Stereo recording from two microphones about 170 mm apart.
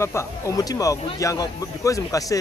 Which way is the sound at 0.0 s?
15° left (ahead or behind).